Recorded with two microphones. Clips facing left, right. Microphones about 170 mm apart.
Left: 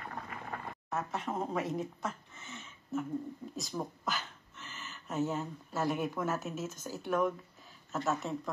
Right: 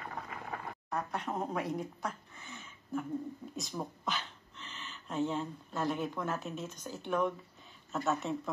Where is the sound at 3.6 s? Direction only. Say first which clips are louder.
Left 2 dB; centre (ahead or behind).